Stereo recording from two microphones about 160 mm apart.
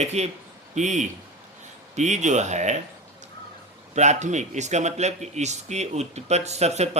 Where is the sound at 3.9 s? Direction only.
45° right (ahead or behind).